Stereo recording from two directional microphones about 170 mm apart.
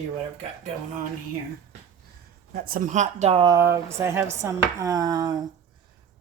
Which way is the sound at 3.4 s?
20° right (ahead or behind).